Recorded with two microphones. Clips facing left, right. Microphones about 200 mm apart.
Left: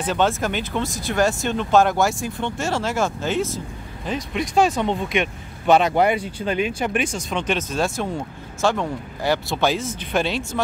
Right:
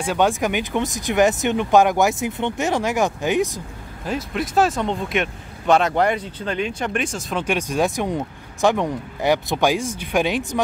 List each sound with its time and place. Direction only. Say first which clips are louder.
0.0 s speech: right 1 dB; 10° right (ahead or behind)
4.0 s speech: right 1 dB; 5° right (ahead or behind)